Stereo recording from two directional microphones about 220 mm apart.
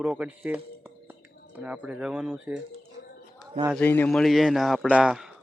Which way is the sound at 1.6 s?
5° right (ahead or behind).